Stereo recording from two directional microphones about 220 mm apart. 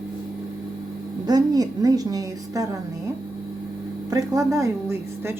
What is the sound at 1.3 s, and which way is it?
A woman's voice, 15° right (ahead or behind).